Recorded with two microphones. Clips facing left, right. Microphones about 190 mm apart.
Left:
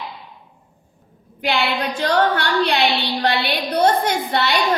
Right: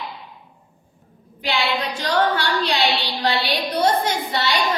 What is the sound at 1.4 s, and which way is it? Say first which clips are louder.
A woman's voice: left 2 dB; 55° left (ahead or behind).